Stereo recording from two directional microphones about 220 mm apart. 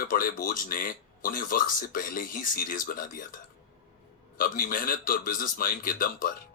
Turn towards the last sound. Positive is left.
turn(degrees=40)  # may be behind; listen again after turning